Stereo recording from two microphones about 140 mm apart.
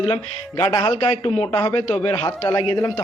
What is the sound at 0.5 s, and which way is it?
Speech, 25° left (ahead or behind).